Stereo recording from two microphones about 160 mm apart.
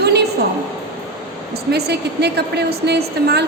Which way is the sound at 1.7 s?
90° right.